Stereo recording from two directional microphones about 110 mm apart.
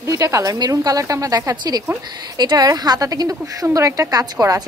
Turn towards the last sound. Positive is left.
turn(degrees=-30)  # may be behind; listen again after turning